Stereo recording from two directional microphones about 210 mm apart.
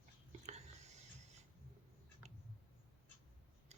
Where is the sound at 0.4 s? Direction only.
30° right (ahead or behind).